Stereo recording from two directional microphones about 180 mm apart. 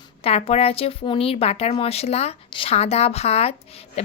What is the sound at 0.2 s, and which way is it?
A woman's voice, 35° left (ahead or behind).